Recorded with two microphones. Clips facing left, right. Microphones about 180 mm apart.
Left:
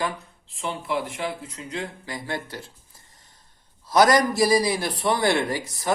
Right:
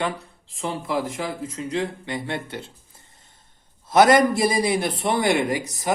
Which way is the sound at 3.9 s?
25° right (ahead or behind).